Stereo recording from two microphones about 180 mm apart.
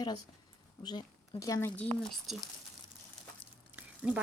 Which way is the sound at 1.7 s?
5° left (ahead or behind).